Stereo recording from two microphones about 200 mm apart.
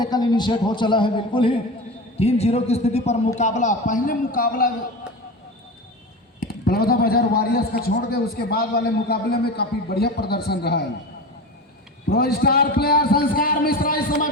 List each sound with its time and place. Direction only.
0.0 s a man's voice: 20° left (ahead or behind); by 4.7 s 45° left (ahead or behind)
6.4 s a man's voice: 50° left (ahead or behind)
12.0 s a man's voice: 50° left (ahead or behind)